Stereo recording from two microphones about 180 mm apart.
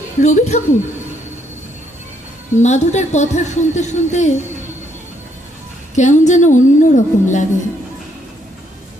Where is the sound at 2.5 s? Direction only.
40° left (ahead or behind).